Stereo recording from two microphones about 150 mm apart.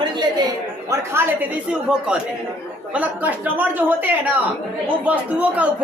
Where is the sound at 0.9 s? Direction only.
15° right (ahead or behind).